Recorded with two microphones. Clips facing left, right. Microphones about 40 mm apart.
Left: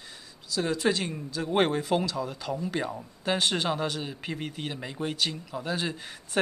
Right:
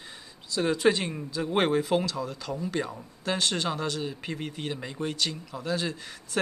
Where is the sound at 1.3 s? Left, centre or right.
Centre.